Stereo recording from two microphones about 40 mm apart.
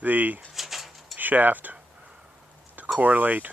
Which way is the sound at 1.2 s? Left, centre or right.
Right.